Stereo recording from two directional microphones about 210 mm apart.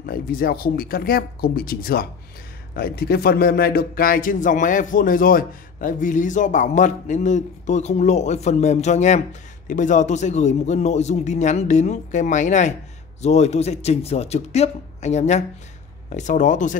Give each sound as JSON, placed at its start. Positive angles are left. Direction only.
{"t": 0.0, "sound": "speech", "side_deg": 45}